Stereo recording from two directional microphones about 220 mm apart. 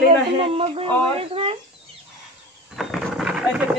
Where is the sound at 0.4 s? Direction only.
25° right (ahead or behind).